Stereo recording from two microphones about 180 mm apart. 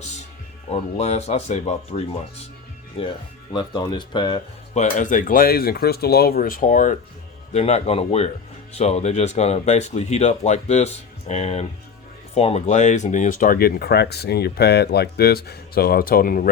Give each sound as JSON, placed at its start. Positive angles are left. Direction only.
{"t": 0.0, "sound": "music", "side_deg": 40}
{"t": 0.7, "sound": "speech", "side_deg": 35}
{"t": 3.5, "sound": "speech", "side_deg": 25}
{"t": 4.7, "sound": "speech", "side_deg": 40}